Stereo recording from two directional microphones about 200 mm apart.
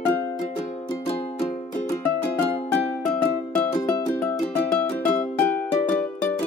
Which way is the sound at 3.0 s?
10° left (ahead or behind).